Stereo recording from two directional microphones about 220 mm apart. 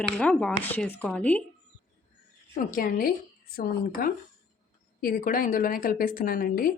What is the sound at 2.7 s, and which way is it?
Speech, 40° left (ahead or behind).